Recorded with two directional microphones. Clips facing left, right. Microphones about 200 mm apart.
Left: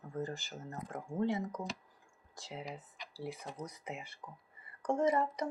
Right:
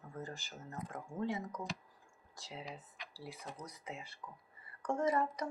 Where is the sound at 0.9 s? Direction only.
30° left (ahead or behind).